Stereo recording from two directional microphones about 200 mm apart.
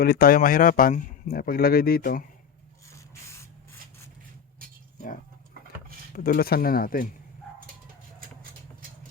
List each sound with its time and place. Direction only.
0.0 s speech: 50° left (ahead or behind)
2.9 s spray: 15° left (ahead or behind)
6.1 s speech: 45° left (ahead or behind)